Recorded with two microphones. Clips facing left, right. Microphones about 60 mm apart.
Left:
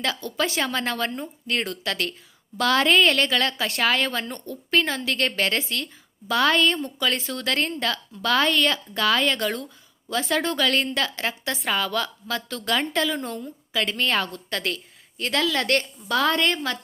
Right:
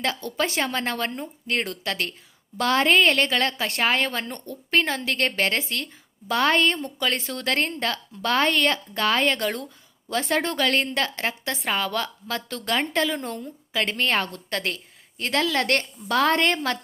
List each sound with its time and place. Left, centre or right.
0.2 s a woman's voice: right